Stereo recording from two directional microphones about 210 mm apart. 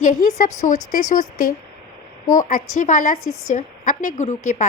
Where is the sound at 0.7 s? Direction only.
35° left (ahead or behind).